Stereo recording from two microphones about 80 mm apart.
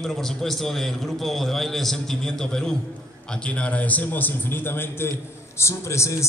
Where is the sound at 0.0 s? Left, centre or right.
Centre.